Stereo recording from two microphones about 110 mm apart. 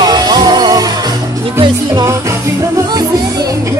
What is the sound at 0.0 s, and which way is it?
Music, 40° right (ahead or behind).